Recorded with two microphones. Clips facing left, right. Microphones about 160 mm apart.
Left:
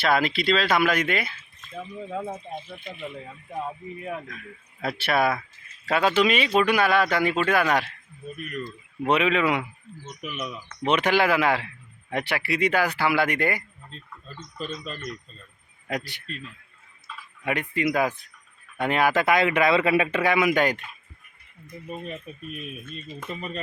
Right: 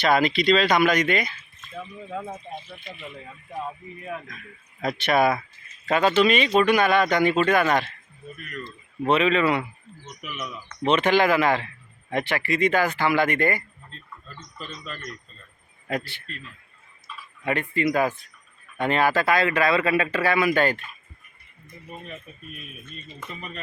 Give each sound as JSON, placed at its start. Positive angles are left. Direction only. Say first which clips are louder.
{"t": 0.0, "sound": "speech", "louder": "right 2 dB", "side_deg": 0}
{"t": 14.3, "sound": "speech", "louder": "left 6 dB", "side_deg": 25}
{"t": 15.9, "sound": "speech", "louder": "right 2 dB", "side_deg": 15}
{"t": 17.4, "sound": "speech", "louder": "right 2 dB", "side_deg": 10}